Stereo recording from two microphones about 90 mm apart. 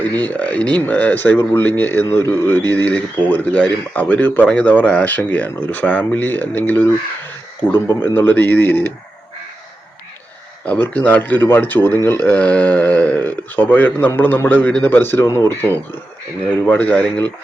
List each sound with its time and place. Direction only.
0.2 s speech: 15° left (ahead or behind)
2.6 s speech: 20° left (ahead or behind)
10.7 s speech: 15° left (ahead or behind)
16.6 s speech: 15° left (ahead or behind)